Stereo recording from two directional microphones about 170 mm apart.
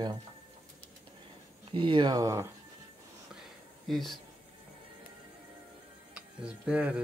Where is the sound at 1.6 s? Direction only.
30° right (ahead or behind).